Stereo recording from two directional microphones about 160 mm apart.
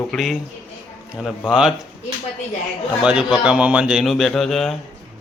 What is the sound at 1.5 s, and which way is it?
Speech, 5° right (ahead or behind).